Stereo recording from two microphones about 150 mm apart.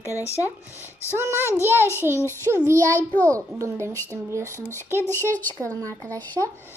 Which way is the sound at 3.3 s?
20° right (ahead or behind).